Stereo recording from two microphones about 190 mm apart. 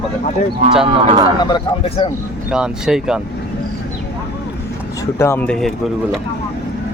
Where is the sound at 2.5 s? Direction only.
5° right (ahead or behind).